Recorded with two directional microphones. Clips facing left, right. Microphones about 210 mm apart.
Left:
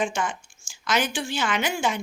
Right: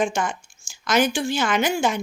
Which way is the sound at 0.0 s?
40° right (ahead or behind).